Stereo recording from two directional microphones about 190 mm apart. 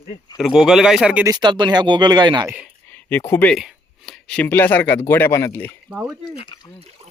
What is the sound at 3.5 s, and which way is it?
Speech, centre (ahead or behind).